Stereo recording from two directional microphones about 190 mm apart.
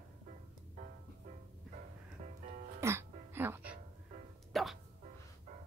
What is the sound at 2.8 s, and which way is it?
Music, 10° right (ahead or behind).